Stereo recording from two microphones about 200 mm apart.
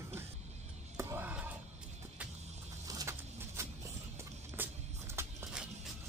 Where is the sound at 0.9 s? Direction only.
10° right (ahead or behind).